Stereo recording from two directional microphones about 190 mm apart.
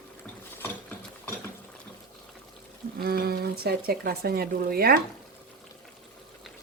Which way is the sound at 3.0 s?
55° right (ahead or behind).